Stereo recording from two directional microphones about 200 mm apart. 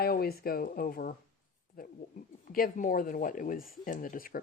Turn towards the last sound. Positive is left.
turn(degrees=45)  # may be behind; listen again after turning